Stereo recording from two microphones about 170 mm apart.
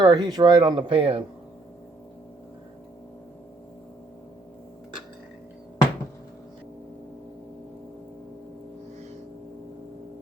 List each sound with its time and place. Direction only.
0.0 s speech: 25° right (ahead or behind)